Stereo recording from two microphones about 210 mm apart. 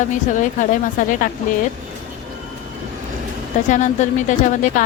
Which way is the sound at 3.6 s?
35° left (ahead or behind).